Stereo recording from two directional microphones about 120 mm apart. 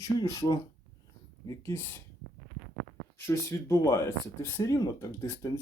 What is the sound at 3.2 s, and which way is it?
Speech, 25° left (ahead or behind).